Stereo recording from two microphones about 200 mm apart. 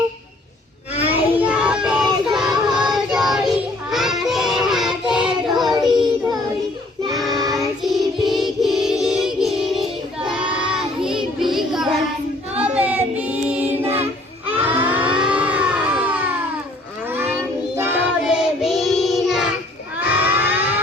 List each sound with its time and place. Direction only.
1.0 s child singing: 10° right (ahead or behind)
7.3 s child singing: 20° right (ahead or behind)
7.8 s child singing: centre (ahead or behind)
14.5 s a sound: 10° right (ahead or behind)
17.1 s child singing: 10° right (ahead or behind)
20.0 s a sound: 10° right (ahead or behind)